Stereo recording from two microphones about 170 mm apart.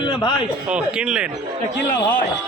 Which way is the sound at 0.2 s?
25° left (ahead or behind).